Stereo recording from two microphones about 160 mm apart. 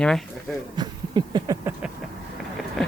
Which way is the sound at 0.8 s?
25° right (ahead or behind).